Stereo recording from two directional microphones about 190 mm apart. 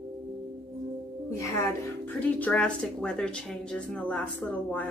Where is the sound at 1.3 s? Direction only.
15° left (ahead or behind).